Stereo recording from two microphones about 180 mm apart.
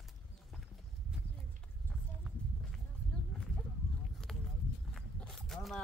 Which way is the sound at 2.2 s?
Centre (ahead or behind).